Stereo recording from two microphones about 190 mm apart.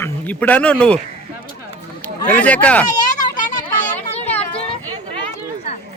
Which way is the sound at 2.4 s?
5° left (ahead or behind).